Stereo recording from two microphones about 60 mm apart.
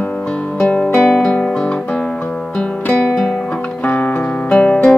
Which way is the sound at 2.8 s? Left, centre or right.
Left.